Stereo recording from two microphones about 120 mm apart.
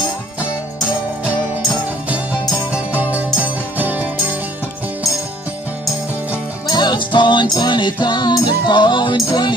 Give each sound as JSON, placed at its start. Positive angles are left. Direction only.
{"t": 3.0, "sound": "music", "side_deg": -15}
{"t": 6.7, "sound": "music", "side_deg": 35}